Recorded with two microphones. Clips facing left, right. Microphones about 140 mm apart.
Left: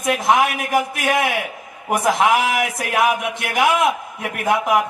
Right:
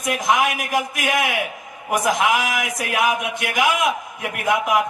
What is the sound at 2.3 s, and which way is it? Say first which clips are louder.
A man's voice: left 4 dB; 30° left (ahead or behind).